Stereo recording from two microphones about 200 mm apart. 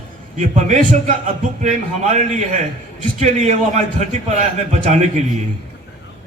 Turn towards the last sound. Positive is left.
turn(degrees=-35)  # may be behind; listen again after turning